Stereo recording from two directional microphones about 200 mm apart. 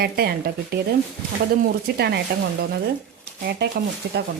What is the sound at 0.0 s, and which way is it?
Speech, 50° right (ahead or behind).